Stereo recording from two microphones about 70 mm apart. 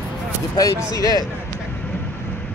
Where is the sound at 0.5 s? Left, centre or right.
Left.